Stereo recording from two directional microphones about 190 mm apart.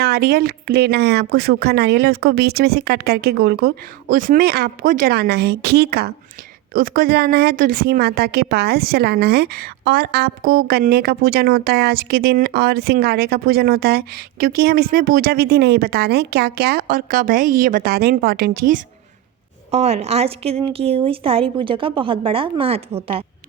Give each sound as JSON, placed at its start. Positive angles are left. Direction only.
{"t": 0.0, "sound": "a woman's voice", "side_deg": -55}
{"t": 19.7, "sound": "a woman's voice", "side_deg": -35}